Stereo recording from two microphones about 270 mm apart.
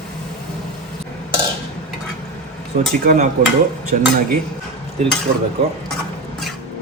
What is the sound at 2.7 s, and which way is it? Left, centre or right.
Speech, right.